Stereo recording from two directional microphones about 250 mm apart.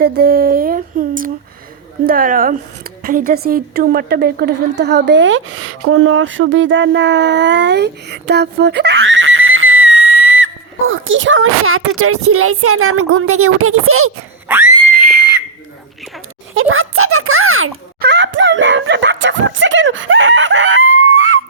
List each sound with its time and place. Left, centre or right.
0.2 s a woman's voice: right
14.4 s screaming: centre
14.9 s whistle: right
16.6 s speech: right
18.0 s a sound: right